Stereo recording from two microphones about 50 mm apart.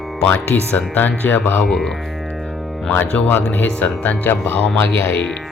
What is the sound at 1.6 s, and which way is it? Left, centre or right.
Speech, centre.